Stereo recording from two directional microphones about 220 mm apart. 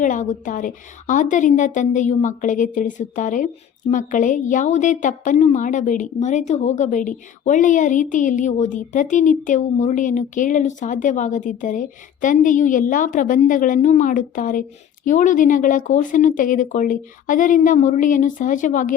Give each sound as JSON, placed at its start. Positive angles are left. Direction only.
{"t": 0.0, "sound": "a woman's voice", "side_deg": 35}